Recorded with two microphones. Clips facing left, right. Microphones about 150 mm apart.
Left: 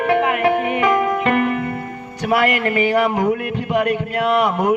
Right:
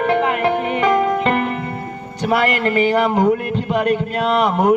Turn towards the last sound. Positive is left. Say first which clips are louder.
# right 1 dB
turn(degrees=-30)  # may be behind; listen again after turning